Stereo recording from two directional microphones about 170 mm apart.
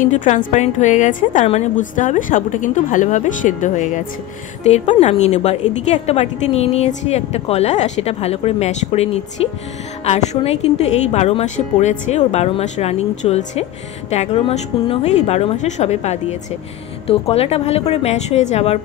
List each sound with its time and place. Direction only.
0.0 s a woman's voice: 45° left (ahead or behind)